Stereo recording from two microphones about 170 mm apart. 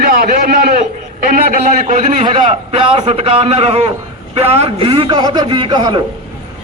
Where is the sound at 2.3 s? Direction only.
30° right (ahead or behind).